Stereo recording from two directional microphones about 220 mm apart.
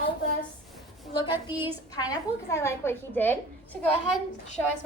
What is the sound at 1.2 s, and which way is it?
A woman's voice, 20° left (ahead or behind).